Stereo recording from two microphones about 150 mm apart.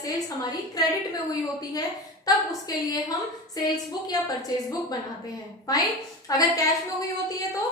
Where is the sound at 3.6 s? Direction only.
25° left (ahead or behind).